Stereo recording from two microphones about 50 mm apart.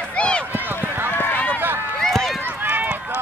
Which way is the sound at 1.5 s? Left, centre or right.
Right.